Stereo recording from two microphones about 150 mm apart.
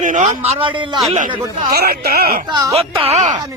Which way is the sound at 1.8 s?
90° right.